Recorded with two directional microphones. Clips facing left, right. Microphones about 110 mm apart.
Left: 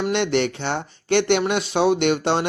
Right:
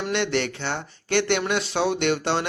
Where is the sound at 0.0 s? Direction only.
20° left (ahead or behind).